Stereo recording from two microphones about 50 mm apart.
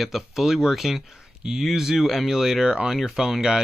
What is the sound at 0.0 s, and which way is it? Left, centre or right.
Speech, centre.